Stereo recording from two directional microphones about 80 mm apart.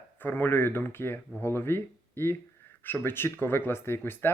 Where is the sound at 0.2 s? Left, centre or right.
Left.